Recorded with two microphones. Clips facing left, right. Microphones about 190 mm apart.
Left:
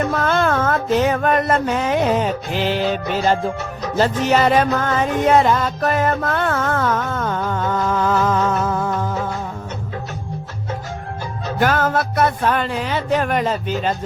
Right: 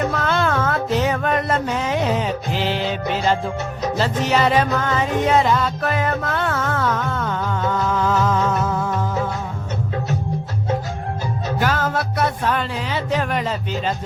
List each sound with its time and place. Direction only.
0.2 s music: 45° left (ahead or behind)
11.6 s music: 50° left (ahead or behind)